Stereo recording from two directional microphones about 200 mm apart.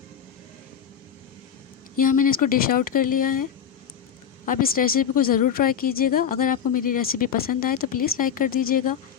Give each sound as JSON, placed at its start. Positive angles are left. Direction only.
{"t": 2.0, "sound": "a woman's voice", "side_deg": 45}
{"t": 4.4, "sound": "a woman's voice", "side_deg": 45}